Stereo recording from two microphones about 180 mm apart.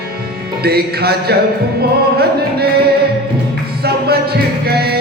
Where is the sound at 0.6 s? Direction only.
60° right (ahead or behind).